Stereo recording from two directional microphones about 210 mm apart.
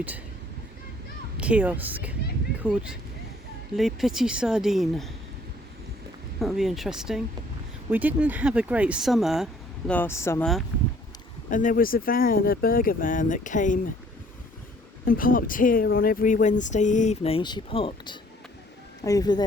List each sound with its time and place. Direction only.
1.4 s speech: 5° right (ahead or behind)
6.4 s speech: centre (ahead or behind)
11.5 s speech: 40° left (ahead or behind)
15.0 s speech: 40° left (ahead or behind); by 19.5 s 20° left (ahead or behind)